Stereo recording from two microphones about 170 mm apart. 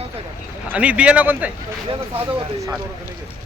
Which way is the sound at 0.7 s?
5° right (ahead or behind).